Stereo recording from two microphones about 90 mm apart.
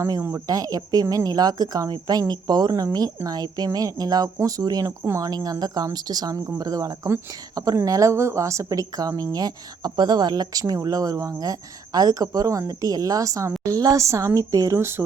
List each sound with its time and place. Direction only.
0.2 s speech: 30° right (ahead or behind)
0.4 s a woman's voice: 45° right (ahead or behind)
4.9 s a woman's voice: 30° right (ahead or behind)
5.2 s a woman's voice: 45° right (ahead or behind)